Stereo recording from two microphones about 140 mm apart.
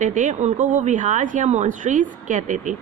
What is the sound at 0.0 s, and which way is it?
Speech, 60° right (ahead or behind).